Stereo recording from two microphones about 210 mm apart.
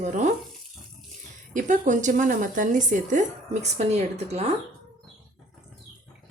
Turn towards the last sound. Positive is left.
turn(degrees=-30)  # may be behind; listen again after turning